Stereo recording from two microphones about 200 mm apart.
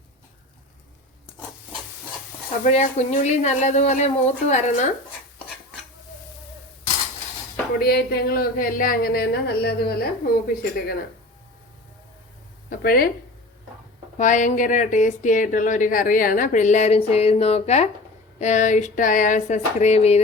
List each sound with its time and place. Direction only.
2.6 s speech: 35° left (ahead or behind)
7.8 s speech: 50° left (ahead or behind)
12.8 s speech: 50° left (ahead or behind)
14.2 s speech: 40° left (ahead or behind)